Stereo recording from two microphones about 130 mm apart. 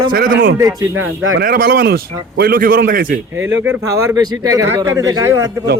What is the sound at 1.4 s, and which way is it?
Speech, 90° right.